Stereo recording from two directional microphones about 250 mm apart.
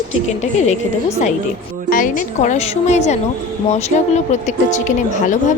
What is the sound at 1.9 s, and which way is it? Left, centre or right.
A woman's voice, left.